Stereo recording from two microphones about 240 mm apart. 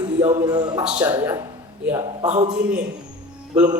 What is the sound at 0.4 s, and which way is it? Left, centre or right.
Speech, centre.